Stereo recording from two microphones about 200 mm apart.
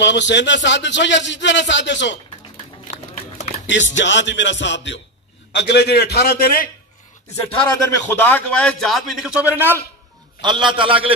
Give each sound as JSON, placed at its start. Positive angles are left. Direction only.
{"t": 0.0, "sound": "a man's voice", "side_deg": 60}
{"t": 3.6, "sound": "a man's voice", "side_deg": 65}
{"t": 7.7, "sound": "a man's voice", "side_deg": 10}
{"t": 10.4, "sound": "a man's voice", "side_deg": -25}